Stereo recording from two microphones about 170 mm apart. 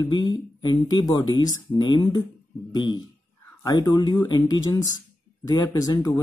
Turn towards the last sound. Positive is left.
turn(degrees=20)  # may be behind; listen again after turning